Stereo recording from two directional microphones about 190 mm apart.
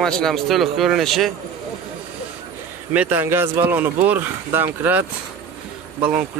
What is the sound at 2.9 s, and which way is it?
Speech, 10° right (ahead or behind).